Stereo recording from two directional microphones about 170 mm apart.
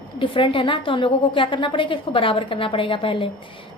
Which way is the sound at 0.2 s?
30° left (ahead or behind).